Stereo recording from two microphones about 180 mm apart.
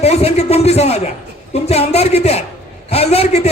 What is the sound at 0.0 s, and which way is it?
A man's voice, 35° left (ahead or behind).